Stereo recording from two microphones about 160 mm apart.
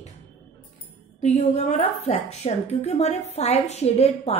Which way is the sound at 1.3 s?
40° left (ahead or behind).